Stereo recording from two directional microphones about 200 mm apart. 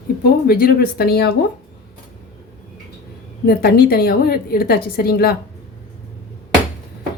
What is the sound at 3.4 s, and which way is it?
A woman's voice, 50° left (ahead or behind).